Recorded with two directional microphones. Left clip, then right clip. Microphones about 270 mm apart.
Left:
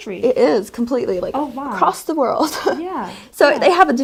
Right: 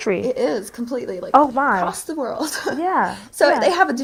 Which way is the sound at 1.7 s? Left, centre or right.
Left.